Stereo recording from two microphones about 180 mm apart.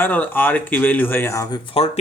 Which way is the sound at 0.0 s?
10° left (ahead or behind).